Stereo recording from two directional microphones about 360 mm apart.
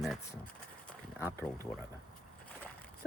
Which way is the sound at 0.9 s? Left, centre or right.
Centre.